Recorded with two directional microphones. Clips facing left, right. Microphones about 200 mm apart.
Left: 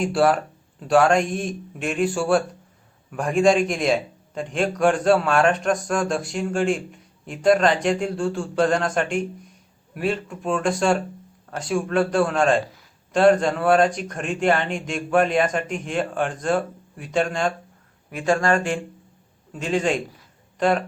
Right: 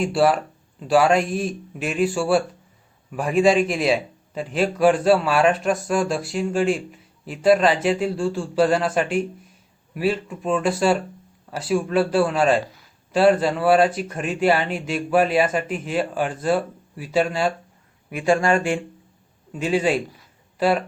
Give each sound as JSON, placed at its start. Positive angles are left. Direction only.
{"t": 0.0, "sound": "a man's voice", "side_deg": 0}